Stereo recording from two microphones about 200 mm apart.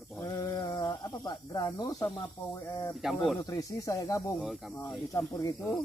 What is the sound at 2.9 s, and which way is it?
Speech, centre (ahead or behind).